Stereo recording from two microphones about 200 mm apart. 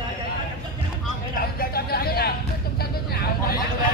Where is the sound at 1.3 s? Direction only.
45° left (ahead or behind).